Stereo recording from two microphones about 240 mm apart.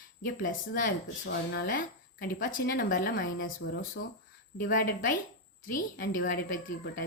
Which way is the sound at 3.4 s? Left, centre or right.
Left.